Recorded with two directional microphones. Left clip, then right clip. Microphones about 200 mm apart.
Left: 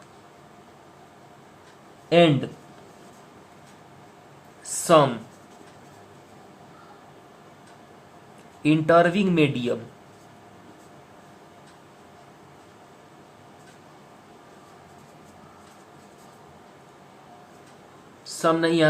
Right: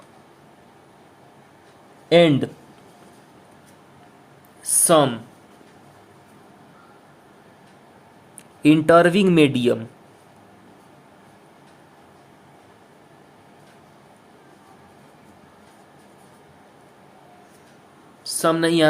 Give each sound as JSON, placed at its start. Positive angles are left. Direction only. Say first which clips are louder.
{"t": 2.0, "sound": "speech", "louder": "right 3 dB", "side_deg": -45}
{"t": 4.9, "sound": "speech", "louder": "right 1 dB", "side_deg": -30}
{"t": 8.6, "sound": "speech", "louder": "right 4 dB", "side_deg": -50}
{"t": 18.3, "sound": "speech", "louder": "right 2 dB", "side_deg": -40}